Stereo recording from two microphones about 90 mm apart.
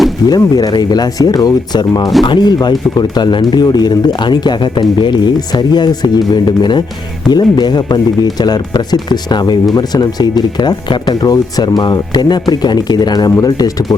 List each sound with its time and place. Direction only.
0.3 s speech: 45° left (ahead or behind)